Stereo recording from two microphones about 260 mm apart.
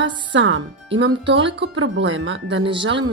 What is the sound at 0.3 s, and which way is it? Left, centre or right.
Speech, right.